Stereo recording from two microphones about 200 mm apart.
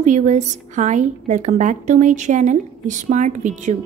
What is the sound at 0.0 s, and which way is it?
A woman's voice, 35° right (ahead or behind).